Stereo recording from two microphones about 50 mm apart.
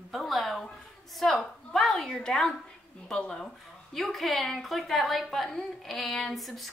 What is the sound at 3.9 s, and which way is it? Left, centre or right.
A woman's voice, centre.